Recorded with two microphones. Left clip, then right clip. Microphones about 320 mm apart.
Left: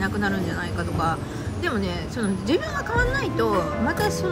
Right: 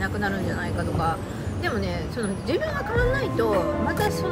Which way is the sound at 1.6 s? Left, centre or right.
Centre.